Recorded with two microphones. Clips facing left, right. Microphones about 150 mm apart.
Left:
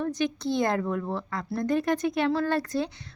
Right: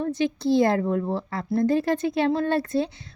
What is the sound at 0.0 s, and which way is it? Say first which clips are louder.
A woman's voice: right 3 dB; 25° right (ahead or behind).